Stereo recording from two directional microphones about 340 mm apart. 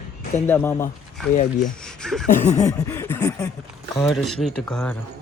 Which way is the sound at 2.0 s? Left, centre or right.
Centre.